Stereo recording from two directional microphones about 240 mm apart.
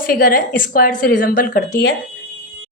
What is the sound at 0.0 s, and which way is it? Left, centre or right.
A woman's voice, left.